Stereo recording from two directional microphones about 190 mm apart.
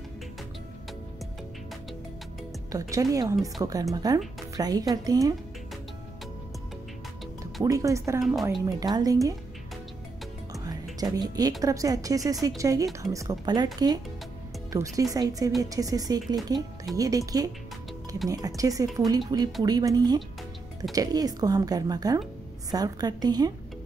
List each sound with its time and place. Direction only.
2.7 s a woman's voice: 15° right (ahead or behind)
7.6 s a woman's voice: 15° right (ahead or behind)
8.2 s a woman's voice: centre (ahead or behind)
8.6 s a woman's voice: 20° right (ahead or behind)
10.5 s a woman's voice: 20° right (ahead or behind)
14.7 s a woman's voice: 15° right (ahead or behind)
18.3 s a woman's voice: 20° right (ahead or behind)